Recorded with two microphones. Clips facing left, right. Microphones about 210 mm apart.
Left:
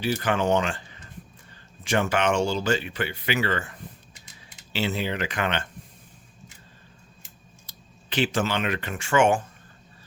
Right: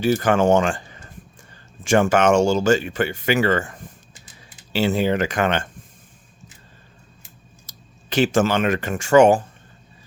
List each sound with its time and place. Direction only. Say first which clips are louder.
0.0 s speech: right 7 dB; 45° right (ahead or behind)
7.7 s speech: right 6 dB; 45° right (ahead or behind)